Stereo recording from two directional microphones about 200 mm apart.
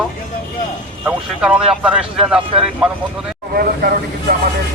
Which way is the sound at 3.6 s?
50° right (ahead or behind).